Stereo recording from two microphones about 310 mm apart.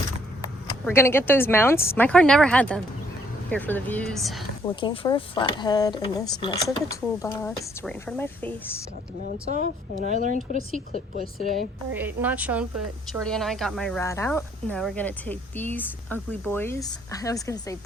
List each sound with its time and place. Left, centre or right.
0.4 s speech: centre
4.7 s speech: centre
9.5 s speech: right
10.9 s speech: centre
11.9 s speech: centre